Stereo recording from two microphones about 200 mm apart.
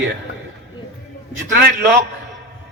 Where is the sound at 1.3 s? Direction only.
50° right (ahead or behind).